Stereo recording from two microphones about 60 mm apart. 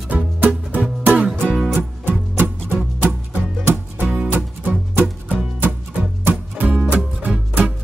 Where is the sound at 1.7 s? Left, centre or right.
Right.